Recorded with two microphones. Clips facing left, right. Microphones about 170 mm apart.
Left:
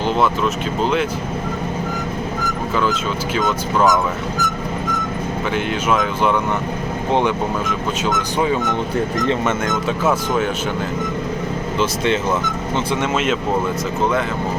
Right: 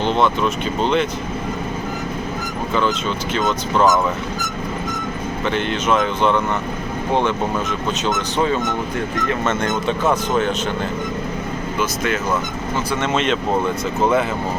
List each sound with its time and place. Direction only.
0.0 s speech: 5° left (ahead or behind)
2.7 s speech: 5° left (ahead or behind)
5.5 s speech: 10° left (ahead or behind)
11.8 s speech: 25° left (ahead or behind)
13.0 s speech: 5° left (ahead or behind)